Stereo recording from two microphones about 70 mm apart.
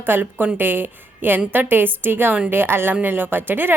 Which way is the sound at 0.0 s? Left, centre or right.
Right.